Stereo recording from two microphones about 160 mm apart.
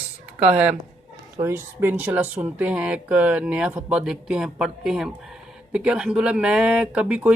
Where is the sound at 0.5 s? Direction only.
10° right (ahead or behind).